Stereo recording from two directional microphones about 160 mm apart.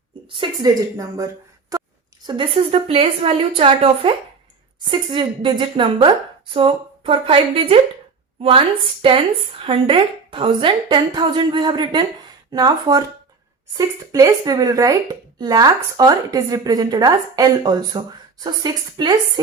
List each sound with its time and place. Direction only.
0.3 s a woman's voice: 30° right (ahead or behind)
1.7 s a sound: 20° right (ahead or behind)
2.2 s a woman's voice: 30° right (ahead or behind)